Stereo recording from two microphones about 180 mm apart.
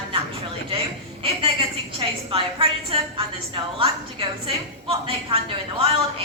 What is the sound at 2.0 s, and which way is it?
A woman's voice, 30° right (ahead or behind).